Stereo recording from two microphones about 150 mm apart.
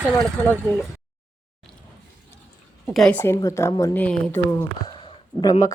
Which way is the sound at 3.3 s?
20° left (ahead or behind).